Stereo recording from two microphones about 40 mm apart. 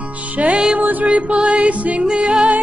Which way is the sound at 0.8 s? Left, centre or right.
Right.